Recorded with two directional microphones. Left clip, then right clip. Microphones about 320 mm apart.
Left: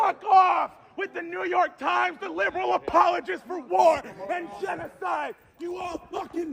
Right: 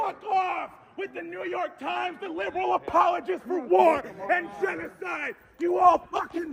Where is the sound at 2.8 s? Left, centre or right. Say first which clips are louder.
Left 3 dB; left.